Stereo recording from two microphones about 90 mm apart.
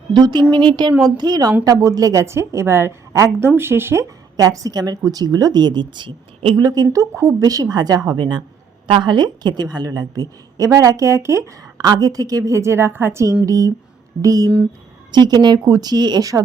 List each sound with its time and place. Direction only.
0.1 s a woman's voice: 55° right (ahead or behind); by 4.0 s 25° right (ahead or behind)
4.4 s a woman's voice: 40° right (ahead or behind)
6.9 s a woman's voice: 35° right (ahead or behind)
11.6 s a woman's voice: 45° right (ahead or behind); by 13.2 s 25° right (ahead or behind)
13.4 s a woman's voice: 40° right (ahead or behind)